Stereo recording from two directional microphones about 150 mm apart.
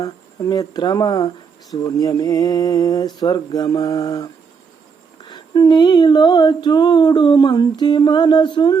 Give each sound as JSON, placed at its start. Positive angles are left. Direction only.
{"t": 0.0, "sound": "humming", "side_deg": 25}
{"t": 5.3, "sound": "humming", "side_deg": 30}